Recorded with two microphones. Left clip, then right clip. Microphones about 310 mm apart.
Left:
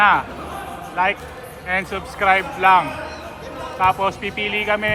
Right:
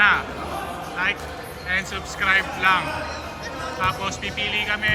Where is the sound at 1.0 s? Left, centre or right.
Centre.